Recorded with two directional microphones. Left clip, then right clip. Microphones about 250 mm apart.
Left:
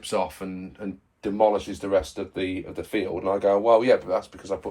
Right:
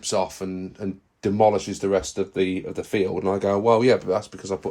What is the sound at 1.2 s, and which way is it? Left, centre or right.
Speech, right.